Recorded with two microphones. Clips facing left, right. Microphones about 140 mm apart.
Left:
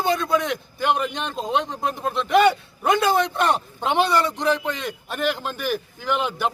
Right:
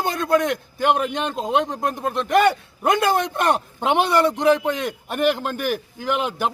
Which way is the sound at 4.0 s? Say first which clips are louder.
Right 2 dB; 55° right (ahead or behind).